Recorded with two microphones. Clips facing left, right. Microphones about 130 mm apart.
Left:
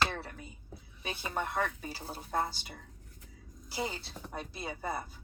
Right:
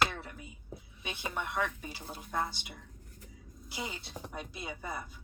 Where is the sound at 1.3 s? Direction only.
40° left (ahead or behind).